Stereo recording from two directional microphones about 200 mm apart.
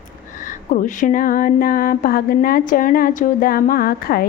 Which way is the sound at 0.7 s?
40° left (ahead or behind).